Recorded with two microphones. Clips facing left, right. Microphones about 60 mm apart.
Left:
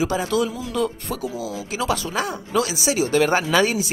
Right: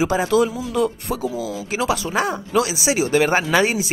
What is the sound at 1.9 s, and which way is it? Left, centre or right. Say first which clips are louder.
Speech: right 3 dB; centre.